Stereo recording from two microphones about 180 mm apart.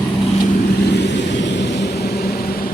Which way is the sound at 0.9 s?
70° left (ahead or behind).